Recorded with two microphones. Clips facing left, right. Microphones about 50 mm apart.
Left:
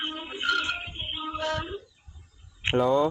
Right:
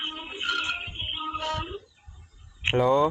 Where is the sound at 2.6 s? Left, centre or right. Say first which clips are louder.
Right 1 dB; centre.